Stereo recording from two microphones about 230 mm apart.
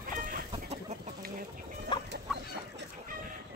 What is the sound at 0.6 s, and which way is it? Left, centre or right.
Chicken, right.